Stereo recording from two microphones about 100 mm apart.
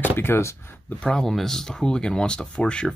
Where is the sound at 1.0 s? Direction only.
5° left (ahead or behind).